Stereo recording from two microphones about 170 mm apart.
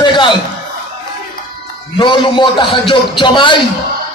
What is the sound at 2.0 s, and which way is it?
Speech, 30° left (ahead or behind).